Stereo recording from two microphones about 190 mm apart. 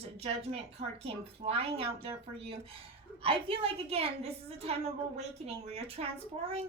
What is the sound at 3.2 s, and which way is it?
A woman's voice, 30° right (ahead or behind).